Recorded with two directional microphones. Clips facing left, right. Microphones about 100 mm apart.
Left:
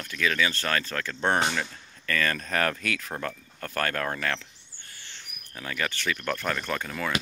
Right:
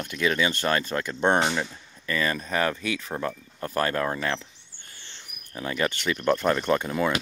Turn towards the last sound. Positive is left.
turn(degrees=-20)  # may be behind; listen again after turning